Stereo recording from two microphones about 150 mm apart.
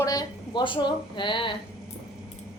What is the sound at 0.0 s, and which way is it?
A woman's voice, 25° left (ahead or behind).